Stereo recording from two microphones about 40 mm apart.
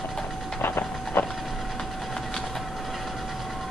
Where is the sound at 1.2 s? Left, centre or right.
Left.